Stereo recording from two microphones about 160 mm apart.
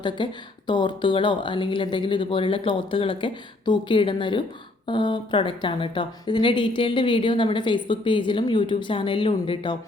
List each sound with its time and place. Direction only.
0.2 s a woman's voice: 30° left (ahead or behind)